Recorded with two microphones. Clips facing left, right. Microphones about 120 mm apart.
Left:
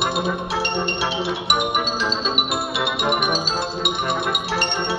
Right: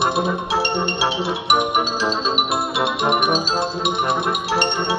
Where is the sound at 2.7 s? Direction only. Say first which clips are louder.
Right 3 dB; 35° right (ahead or behind).